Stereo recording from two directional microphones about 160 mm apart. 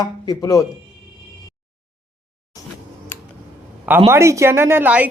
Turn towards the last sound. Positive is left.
turn(degrees=-10)  # may be behind; listen again after turning